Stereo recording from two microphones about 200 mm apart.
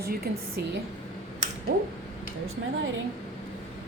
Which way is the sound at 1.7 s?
40° right (ahead or behind).